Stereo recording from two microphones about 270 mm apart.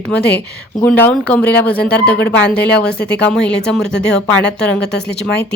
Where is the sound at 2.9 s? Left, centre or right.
Left.